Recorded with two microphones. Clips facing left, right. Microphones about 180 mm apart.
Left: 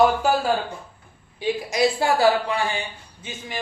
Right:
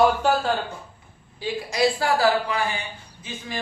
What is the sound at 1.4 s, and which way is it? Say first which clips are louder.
A woman's voice: left 1 dB; 20° left (ahead or behind).